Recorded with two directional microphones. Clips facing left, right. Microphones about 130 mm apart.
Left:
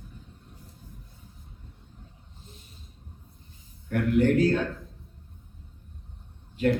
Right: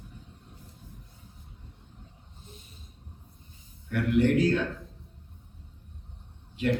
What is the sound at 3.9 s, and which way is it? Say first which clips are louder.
Speech: left 1 dB; 45° left (ahead or behind).